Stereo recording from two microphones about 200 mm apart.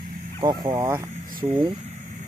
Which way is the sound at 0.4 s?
20° right (ahead or behind).